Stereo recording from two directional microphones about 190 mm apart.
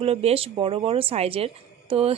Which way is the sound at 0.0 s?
30° right (ahead or behind).